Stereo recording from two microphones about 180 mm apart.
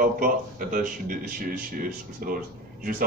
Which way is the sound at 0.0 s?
50° right (ahead or behind).